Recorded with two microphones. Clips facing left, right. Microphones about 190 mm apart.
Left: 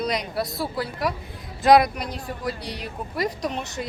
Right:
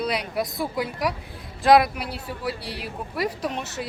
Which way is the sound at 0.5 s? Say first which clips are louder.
Right 1 dB; 15° right (ahead or behind).